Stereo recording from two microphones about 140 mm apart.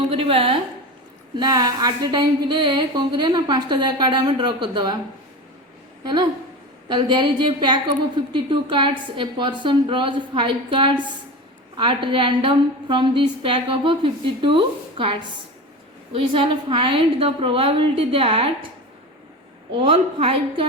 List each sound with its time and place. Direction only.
0.1 s a woman's voice: 40° right (ahead or behind)
1.4 s a woman's voice: 30° right (ahead or behind)
6.8 s a woman's voice: 35° right (ahead or behind)
19.7 s a woman's voice: 40° right (ahead or behind)